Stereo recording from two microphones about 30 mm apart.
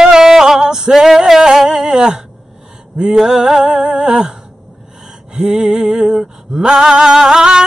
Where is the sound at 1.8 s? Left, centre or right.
Right.